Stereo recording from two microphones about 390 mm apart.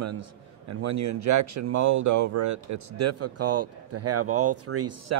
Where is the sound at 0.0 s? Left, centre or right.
Right.